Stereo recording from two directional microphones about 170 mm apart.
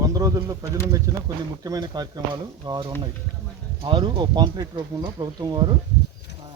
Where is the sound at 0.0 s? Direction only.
20° right (ahead or behind).